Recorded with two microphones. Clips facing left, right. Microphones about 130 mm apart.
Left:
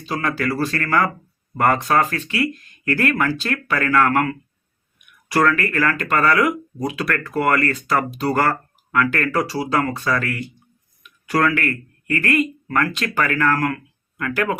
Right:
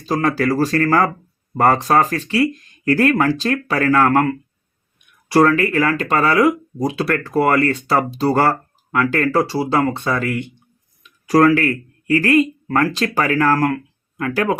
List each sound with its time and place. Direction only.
0.0 s speech: 35° right (ahead or behind); by 10.5 s 20° right (ahead or behind)
11.0 s speech: 35° right (ahead or behind)